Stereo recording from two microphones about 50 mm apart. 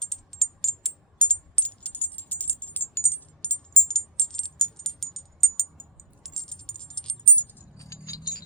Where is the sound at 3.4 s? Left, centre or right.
Left.